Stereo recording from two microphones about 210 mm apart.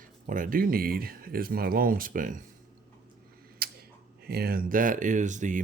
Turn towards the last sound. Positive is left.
turn(degrees=-35)  # may be behind; listen again after turning